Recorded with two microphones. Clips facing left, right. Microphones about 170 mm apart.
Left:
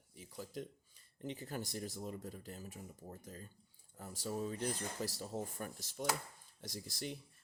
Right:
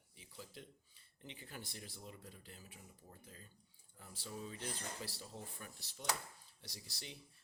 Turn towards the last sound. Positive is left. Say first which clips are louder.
# left 10 dB
turn(degrees=50)  # may be behind; listen again after turning